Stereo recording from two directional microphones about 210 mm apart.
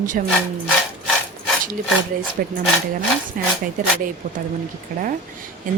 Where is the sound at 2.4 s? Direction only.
45° right (ahead or behind).